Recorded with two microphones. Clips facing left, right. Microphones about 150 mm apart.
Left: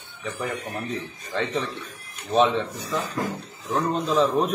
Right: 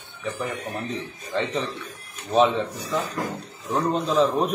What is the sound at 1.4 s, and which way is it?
A man's voice, centre (ahead or behind).